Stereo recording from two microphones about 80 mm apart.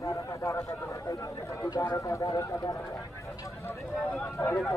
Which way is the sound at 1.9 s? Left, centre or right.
Left.